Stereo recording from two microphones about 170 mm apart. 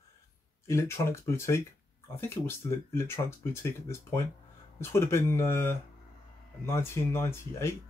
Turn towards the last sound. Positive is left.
turn(degrees=15)  # may be behind; listen again after turning